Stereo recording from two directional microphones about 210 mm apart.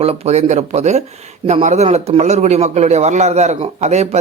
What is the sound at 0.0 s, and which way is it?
Speech, 30° right (ahead or behind).